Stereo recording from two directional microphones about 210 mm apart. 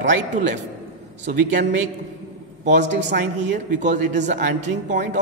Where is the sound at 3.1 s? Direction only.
50° right (ahead or behind).